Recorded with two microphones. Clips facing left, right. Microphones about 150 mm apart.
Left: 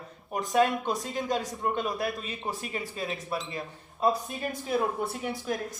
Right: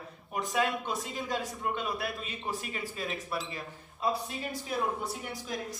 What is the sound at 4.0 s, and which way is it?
Speech, 50° left (ahead or behind).